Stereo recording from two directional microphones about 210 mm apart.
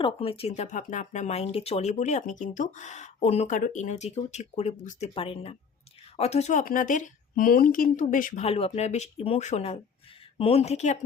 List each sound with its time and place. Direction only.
0.0 s speech: 25° left (ahead or behind)